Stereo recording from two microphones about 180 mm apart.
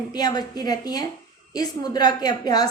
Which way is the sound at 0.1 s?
20° left (ahead or behind).